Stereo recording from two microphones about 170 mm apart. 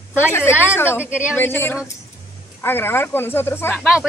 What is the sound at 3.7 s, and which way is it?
Speech, 5° right (ahead or behind).